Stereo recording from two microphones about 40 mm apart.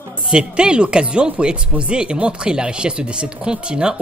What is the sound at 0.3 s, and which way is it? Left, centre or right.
Speech, right.